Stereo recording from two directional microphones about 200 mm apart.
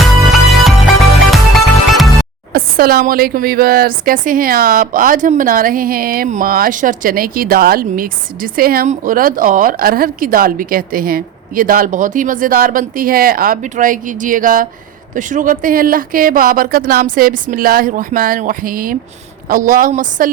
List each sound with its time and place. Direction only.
1.3 s music: centre (ahead or behind)
2.5 s speech: 50° right (ahead or behind)